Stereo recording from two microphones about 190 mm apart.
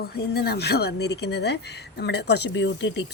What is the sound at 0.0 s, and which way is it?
Speech, 55° left (ahead or behind).